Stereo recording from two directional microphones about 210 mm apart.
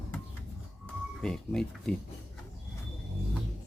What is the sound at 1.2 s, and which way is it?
Speech, 5° left (ahead or behind).